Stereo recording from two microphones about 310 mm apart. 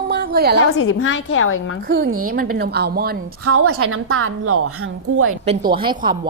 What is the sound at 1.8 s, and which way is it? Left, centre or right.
Speech, right.